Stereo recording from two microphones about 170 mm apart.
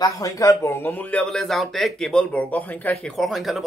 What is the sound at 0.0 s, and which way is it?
Speech, 20° left (ahead or behind).